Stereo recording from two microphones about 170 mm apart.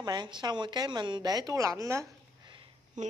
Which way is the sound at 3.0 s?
45° right (ahead or behind).